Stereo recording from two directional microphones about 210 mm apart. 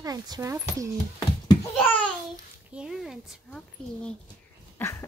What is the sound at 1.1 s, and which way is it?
Babbling, 20° left (ahead or behind).